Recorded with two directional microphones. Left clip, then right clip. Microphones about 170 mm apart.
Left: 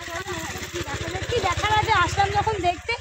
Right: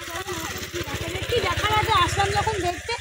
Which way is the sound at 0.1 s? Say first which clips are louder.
Right 1 dB; 25° left (ahead or behind).